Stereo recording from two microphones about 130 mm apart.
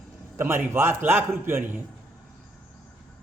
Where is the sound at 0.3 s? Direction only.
20° right (ahead or behind).